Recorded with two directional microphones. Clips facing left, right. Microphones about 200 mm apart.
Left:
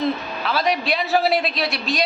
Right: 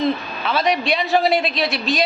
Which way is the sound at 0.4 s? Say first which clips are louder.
Right 2 dB; centre (ahead or behind).